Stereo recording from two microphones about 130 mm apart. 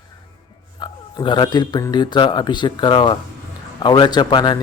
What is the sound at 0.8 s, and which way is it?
A man's voice, 35° left (ahead or behind).